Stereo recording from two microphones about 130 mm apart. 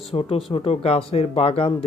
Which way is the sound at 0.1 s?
45° left (ahead or behind).